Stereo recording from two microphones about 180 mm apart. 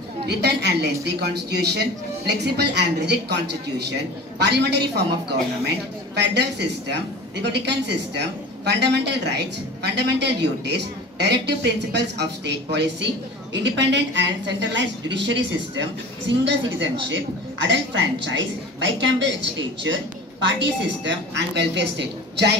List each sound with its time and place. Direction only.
0.3 s a man's voice: 65° right (ahead or behind)
6.1 s a man's voice: 70° right (ahead or behind)